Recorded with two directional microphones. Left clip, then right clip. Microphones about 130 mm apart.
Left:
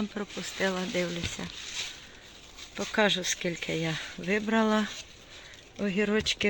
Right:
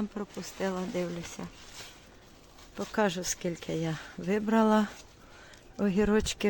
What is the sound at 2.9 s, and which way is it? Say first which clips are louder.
Speech: left 4 dB; 15° right (ahead or behind).